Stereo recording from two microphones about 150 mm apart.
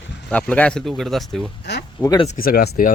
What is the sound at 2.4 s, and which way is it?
Speech, 90° left.